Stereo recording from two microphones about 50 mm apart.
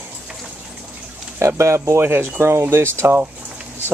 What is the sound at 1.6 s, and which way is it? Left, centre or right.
Speech, right.